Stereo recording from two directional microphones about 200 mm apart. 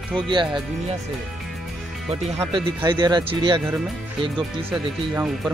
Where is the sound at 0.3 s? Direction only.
25° right (ahead or behind).